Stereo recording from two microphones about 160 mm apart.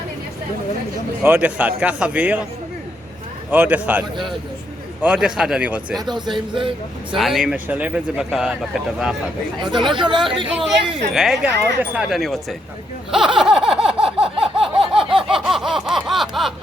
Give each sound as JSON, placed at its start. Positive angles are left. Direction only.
{"t": 1.2, "sound": "a man's voice", "side_deg": -10}
{"t": 3.5, "sound": "a man's voice", "side_deg": -10}
{"t": 5.0, "sound": "a man's voice", "side_deg": -5}
{"t": 6.1, "sound": "a man's voice", "side_deg": -30}
{"t": 7.2, "sound": "a man's voice", "side_deg": 0}
{"t": 9.6, "sound": "speech", "side_deg": -30}
{"t": 10.8, "sound": "a man's voice", "side_deg": 0}
{"t": 13.1, "sound": "a sound", "side_deg": -5}